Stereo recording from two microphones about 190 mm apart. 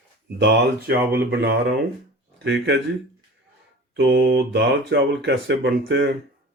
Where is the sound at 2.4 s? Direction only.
70° right (ahead or behind).